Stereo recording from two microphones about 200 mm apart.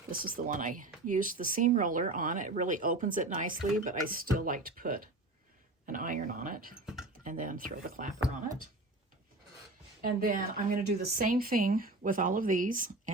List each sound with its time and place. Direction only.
0.1 s speech: 45° right (ahead or behind)
10.0 s speech: 45° right (ahead or behind)